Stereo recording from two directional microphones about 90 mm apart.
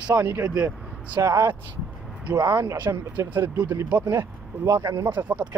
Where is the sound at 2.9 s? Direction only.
35° right (ahead or behind).